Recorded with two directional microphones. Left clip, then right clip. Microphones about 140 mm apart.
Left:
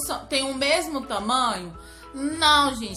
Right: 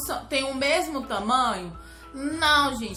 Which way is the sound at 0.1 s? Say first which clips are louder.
Left 1 dB; 25° left (ahead or behind).